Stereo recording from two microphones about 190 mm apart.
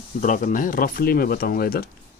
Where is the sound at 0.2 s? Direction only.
45° left (ahead or behind).